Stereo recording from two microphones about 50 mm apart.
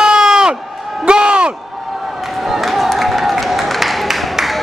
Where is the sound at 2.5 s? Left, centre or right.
Centre.